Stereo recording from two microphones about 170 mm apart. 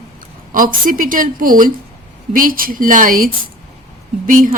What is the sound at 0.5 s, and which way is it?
A woman's voice, 55° right (ahead or behind).